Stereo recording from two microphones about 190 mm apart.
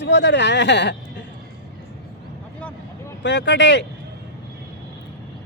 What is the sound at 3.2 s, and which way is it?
Speech, 70° left (ahead or behind).